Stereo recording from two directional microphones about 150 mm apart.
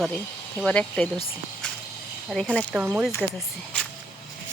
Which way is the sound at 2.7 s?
10° right (ahead or behind).